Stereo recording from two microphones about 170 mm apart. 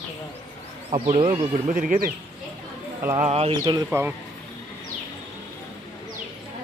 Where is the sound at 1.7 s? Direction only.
55° right (ahead or behind).